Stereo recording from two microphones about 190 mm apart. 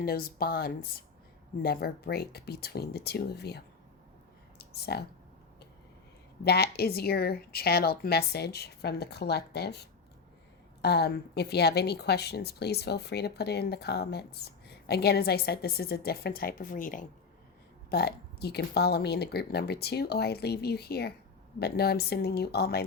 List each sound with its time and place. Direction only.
0.0 s a woman's voice: 50° left (ahead or behind)
4.5 s a sound: 60° left (ahead or behind)
6.4 s a woman's voice: 60° left (ahead or behind)
17.9 s a woman's voice: 55° left (ahead or behind)